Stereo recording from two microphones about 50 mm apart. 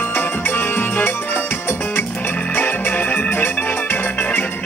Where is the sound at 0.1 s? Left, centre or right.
Left.